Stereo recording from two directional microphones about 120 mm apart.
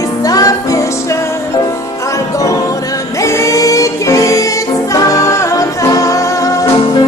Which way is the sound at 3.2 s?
25° left (ahead or behind).